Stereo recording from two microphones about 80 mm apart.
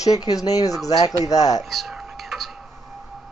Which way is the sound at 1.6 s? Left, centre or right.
Centre.